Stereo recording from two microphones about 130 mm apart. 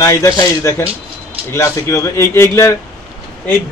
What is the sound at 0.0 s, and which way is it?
A man's voice, 25° left (ahead or behind).